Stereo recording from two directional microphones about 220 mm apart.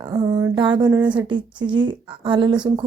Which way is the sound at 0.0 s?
15° right (ahead or behind).